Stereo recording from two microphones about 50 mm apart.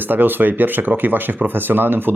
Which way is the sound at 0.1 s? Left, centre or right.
Right.